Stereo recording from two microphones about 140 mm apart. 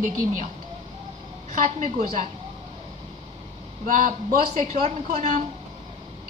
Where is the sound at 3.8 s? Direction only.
75° right (ahead or behind).